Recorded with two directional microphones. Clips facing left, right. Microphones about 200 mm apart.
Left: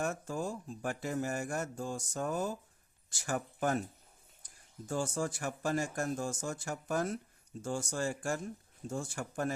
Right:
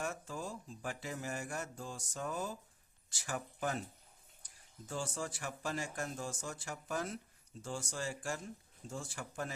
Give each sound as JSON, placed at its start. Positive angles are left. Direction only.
{"t": 0.0, "sound": "speech", "side_deg": 45}
{"t": 4.9, "sound": "speech", "side_deg": 45}